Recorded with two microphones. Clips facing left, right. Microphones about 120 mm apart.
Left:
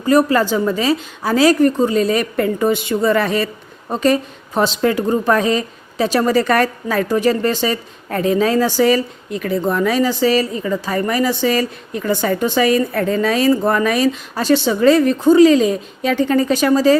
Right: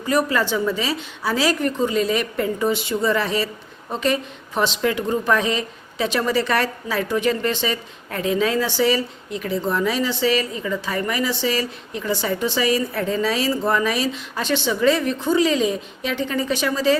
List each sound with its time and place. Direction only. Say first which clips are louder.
0.0 s a woman's voice: left 7 dB; 45° left (ahead or behind)
2.3 s a woman's voice: left 5 dB; 55° left (ahead or behind)